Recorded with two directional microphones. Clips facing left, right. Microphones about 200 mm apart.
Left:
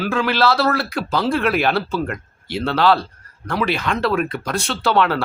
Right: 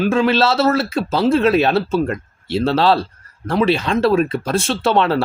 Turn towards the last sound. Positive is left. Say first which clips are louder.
# right 2 dB
turn(degrees=-25)  # may be behind; listen again after turning